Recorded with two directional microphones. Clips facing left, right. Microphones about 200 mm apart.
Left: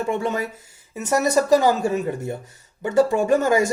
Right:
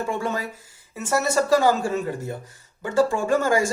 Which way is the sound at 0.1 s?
20° left (ahead or behind).